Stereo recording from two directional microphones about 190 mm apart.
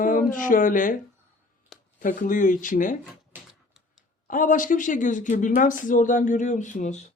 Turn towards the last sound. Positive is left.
turn(degrees=40)  # may be behind; listen again after turning